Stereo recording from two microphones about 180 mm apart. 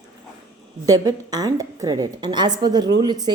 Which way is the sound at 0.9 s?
20° right (ahead or behind).